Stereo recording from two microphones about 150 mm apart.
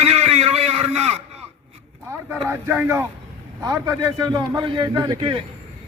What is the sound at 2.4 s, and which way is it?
Speech, 15° right (ahead or behind).